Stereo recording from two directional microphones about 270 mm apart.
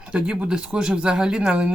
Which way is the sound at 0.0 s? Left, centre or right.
Centre.